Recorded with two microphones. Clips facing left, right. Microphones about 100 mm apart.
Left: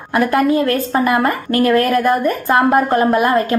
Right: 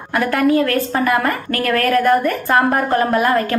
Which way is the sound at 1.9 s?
30° left (ahead or behind).